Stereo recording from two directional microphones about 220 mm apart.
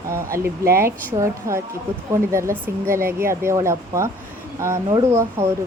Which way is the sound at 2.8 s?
10° right (ahead or behind).